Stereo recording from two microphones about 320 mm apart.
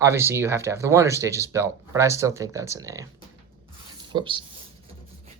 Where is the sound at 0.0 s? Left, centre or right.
Centre.